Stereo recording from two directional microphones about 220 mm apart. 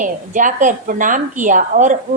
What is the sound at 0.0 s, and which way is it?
A woman's voice, 35° right (ahead or behind).